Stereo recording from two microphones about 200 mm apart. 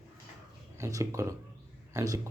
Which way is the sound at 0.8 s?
15° right (ahead or behind).